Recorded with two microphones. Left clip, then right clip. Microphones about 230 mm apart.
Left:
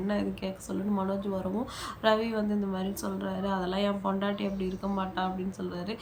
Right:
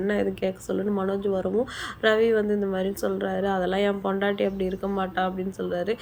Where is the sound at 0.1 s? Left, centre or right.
Centre.